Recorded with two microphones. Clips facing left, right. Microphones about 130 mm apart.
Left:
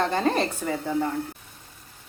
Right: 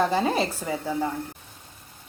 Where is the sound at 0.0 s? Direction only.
5° right (ahead or behind).